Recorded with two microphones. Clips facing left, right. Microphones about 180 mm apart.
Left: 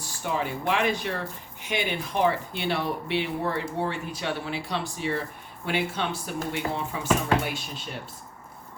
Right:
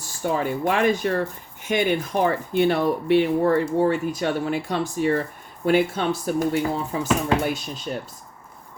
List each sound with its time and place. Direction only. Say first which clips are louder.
0.0 s speech: right 5 dB; 45° right (ahead or behind)